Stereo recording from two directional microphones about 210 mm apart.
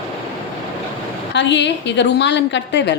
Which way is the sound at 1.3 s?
55° left (ahead or behind).